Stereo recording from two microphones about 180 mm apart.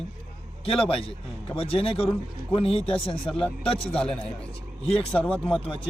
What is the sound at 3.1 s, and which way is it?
Speech, 5° left (ahead or behind).